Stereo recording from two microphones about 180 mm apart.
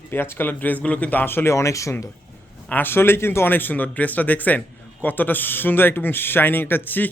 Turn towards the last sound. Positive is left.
turn(degrees=10)  # may be behind; listen again after turning